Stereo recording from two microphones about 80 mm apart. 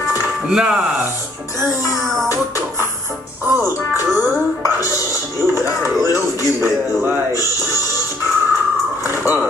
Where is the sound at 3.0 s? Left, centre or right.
Right.